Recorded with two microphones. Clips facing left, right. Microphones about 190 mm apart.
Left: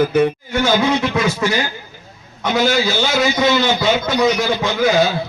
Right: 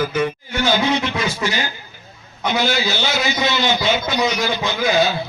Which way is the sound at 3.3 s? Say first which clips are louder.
Left 4 dB; 55° left (ahead or behind).